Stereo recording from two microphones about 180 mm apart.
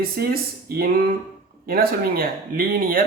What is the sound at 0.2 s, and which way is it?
Speech, 60° right (ahead or behind).